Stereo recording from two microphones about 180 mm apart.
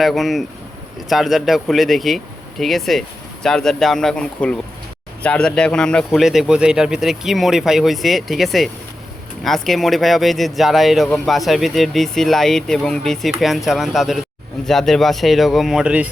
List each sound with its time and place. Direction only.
0.0 s speech: centre (ahead or behind)